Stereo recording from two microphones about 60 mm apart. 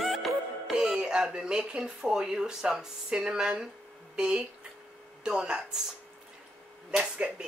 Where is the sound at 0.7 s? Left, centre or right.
Centre.